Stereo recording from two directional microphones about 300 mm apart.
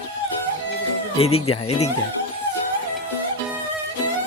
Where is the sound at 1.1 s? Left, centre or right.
Centre.